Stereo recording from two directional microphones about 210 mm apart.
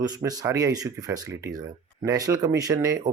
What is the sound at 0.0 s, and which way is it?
Speech, 15° right (ahead or behind).